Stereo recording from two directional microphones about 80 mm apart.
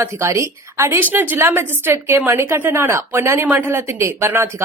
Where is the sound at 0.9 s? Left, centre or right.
Right.